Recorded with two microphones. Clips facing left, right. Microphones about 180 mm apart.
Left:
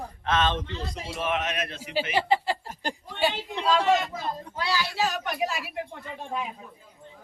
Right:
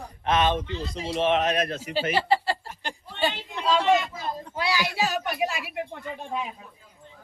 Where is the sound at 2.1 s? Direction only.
15° left (ahead or behind).